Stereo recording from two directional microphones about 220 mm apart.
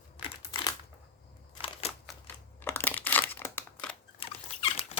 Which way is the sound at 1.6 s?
25° left (ahead or behind).